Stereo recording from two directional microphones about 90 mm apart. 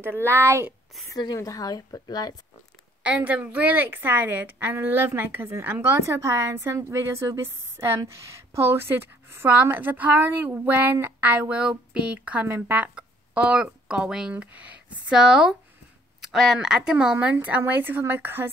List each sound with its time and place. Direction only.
0.0 s a woman's voice: 25° right (ahead or behind)
1.1 s speech: 45° left (ahead or behind)
3.1 s a woman's voice: 15° right (ahead or behind)
16.3 s a sound: centre (ahead or behind)
16.5 s a woman's voice: 5° right (ahead or behind); by 18.5 s 25° right (ahead or behind)